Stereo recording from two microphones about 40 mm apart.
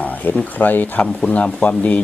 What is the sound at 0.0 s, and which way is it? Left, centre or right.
Speech, left.